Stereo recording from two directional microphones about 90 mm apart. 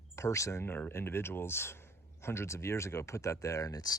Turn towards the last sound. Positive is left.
turn(degrees=40)  # may be behind; listen again after turning